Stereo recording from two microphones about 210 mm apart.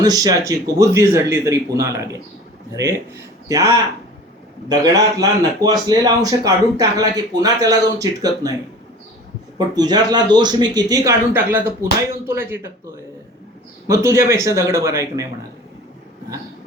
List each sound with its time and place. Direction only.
0.0 s speech: 15° right (ahead or behind)
3.5 s speech: 15° right (ahead or behind)
9.6 s speech: 20° right (ahead or behind)